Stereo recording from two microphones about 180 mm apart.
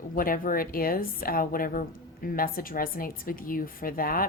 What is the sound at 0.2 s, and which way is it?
Speech, 50° left (ahead or behind).